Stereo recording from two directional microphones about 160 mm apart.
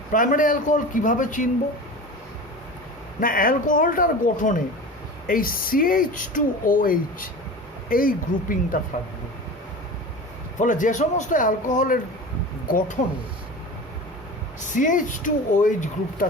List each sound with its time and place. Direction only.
0.1 s speech: 55° left (ahead or behind)
3.2 s speech: 60° left (ahead or behind)
10.6 s speech: 55° left (ahead or behind)
14.8 s speech: 55° left (ahead or behind)